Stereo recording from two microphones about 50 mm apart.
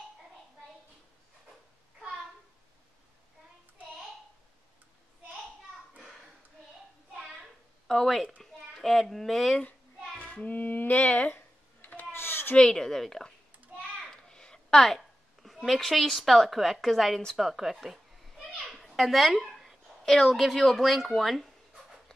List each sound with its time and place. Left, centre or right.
7.9 s a child's voice: centre
10.1 s a child's voice: left
12.1 s a sound: left
12.5 s a woman's voice: centre
18.7 s a sound: centre
20.3 s speech: centre